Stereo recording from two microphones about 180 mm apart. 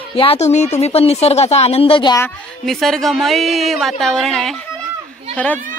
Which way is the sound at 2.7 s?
Centre (ahead or behind).